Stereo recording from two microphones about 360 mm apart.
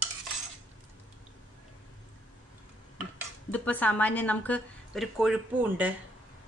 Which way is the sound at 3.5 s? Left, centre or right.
Centre.